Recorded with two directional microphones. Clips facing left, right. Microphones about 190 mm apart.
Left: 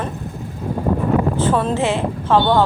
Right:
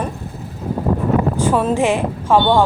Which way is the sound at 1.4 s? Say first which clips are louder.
Right 2 dB; 10° right (ahead or behind).